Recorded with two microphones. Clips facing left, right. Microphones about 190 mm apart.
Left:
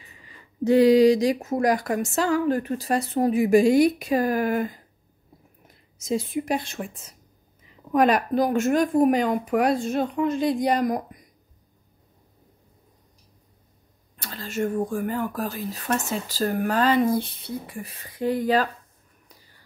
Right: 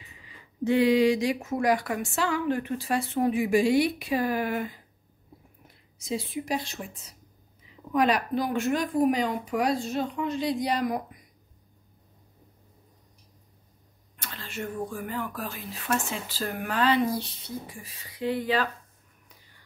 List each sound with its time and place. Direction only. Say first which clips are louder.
0.2 s speech: left 4 dB; 40° left (ahead or behind)
5.9 s a woman's voice: left 6 dB; 45° left (ahead or behind)
14.1 s a woman's voice: left 8 dB; 35° left (ahead or behind)